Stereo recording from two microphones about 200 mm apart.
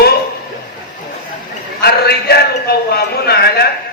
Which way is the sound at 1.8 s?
50° left (ahead or behind).